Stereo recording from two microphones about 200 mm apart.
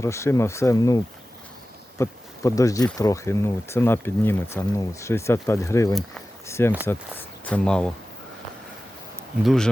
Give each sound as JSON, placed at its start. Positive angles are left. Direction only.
{"t": 0.0, "sound": "speech", "side_deg": 15}
{"t": 9.4, "sound": "speech", "side_deg": 0}